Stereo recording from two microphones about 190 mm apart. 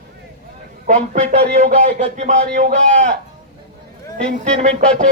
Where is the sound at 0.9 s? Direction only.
40° right (ahead or behind).